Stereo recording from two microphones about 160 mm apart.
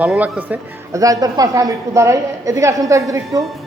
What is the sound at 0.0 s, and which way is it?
Speech, 10° right (ahead or behind).